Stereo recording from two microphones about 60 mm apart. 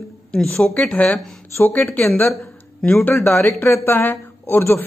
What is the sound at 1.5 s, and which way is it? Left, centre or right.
Speech, left.